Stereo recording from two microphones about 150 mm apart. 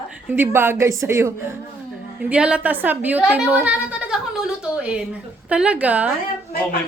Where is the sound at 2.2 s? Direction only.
10° right (ahead or behind).